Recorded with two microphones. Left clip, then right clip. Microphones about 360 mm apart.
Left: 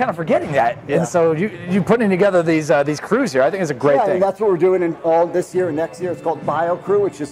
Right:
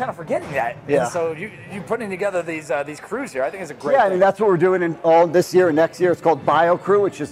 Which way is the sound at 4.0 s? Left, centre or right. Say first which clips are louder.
Right 1 dB; right.